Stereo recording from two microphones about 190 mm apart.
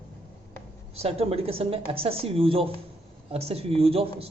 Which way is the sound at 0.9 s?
30° right (ahead or behind).